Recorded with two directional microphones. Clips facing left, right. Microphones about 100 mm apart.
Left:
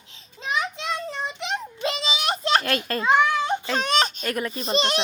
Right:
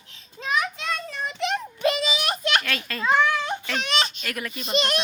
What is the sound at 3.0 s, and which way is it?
Baby cry, 15° left (ahead or behind).